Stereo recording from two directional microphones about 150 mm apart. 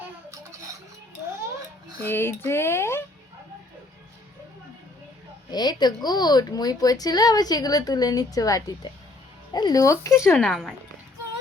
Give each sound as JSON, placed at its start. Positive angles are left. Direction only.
{"t": 2.0, "sound": "speech", "side_deg": 15}
{"t": 5.5, "sound": "speech", "side_deg": 30}
{"t": 10.3, "sound": "speech", "side_deg": 5}